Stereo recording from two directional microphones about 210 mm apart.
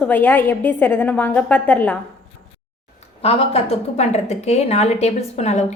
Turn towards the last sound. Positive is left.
turn(degrees=30)  # may be behind; listen again after turning